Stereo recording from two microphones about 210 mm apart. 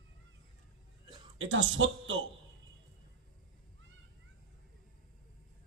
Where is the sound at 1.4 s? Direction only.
65° right (ahead or behind).